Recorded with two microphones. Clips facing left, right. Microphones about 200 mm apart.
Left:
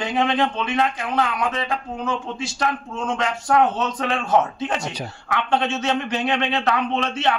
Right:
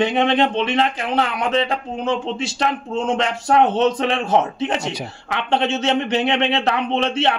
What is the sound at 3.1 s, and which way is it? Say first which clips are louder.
Speech: right 2 dB; 25° right (ahead or behind).